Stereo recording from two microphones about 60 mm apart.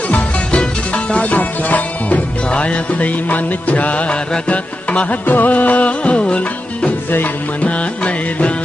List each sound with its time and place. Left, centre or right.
0.1 s music: left